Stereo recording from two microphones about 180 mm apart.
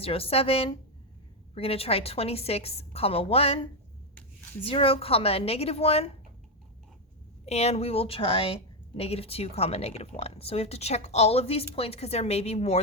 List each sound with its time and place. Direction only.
0.0 s a woman's voice: 30° left (ahead or behind)
7.4 s a woman's voice: 35° left (ahead or behind)